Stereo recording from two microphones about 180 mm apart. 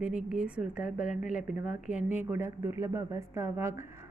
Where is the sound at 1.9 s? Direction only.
45° left (ahead or behind).